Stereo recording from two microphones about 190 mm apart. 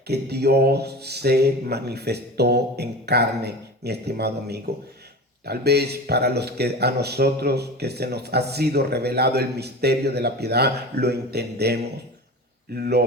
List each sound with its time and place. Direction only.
0.1 s speech: 60° right (ahead or behind)